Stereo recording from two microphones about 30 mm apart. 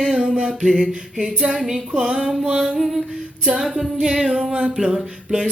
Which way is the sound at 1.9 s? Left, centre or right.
Right.